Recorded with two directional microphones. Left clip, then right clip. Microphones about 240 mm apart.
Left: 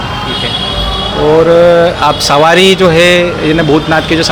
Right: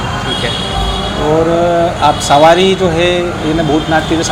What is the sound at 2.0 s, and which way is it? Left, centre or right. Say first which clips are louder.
Speech: even; left.